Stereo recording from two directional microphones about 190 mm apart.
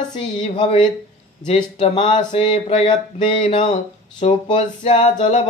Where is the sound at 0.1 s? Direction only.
25° left (ahead or behind).